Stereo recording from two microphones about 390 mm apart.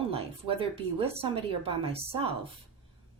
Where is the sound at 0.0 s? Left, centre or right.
Centre.